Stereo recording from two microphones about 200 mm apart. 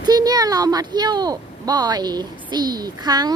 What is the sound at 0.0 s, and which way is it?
Speech, 20° right (ahead or behind).